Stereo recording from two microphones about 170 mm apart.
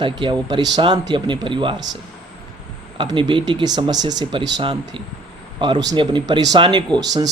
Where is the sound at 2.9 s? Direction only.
30° right (ahead or behind).